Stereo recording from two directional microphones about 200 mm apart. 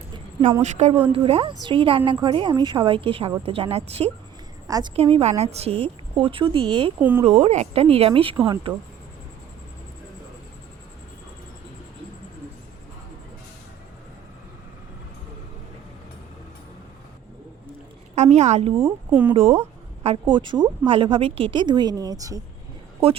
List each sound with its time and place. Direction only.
0.6 s a woman's voice: 35° right (ahead or behind)
4.6 s a woman's voice: 20° right (ahead or behind)
4.9 s a woman's voice: 30° right (ahead or behind)
7.0 s speech: 10° right (ahead or behind)
7.3 s a woman's voice: 30° right (ahead or behind)
18.1 s a sound: 35° right (ahead or behind)
18.8 s speech: 10° right (ahead or behind)
19.3 s a woman's voice: 30° right (ahead or behind)